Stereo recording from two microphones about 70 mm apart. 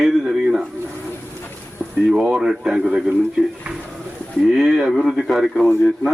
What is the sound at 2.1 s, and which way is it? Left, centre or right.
Speech, centre.